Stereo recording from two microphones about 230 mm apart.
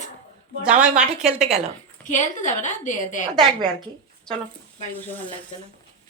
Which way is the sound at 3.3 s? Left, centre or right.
Centre.